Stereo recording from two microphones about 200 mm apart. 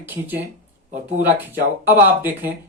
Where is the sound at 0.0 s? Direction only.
10° right (ahead or behind).